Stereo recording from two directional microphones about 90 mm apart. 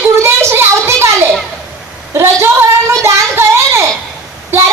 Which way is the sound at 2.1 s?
30° right (ahead or behind).